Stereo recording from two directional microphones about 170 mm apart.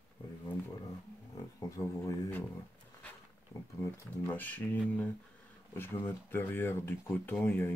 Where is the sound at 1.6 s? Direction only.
20° left (ahead or behind).